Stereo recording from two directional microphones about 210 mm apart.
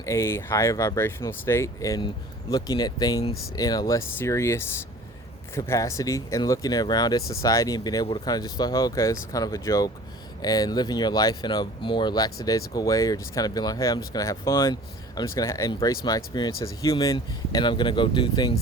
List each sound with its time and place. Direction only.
0.0 s speech: 15° left (ahead or behind)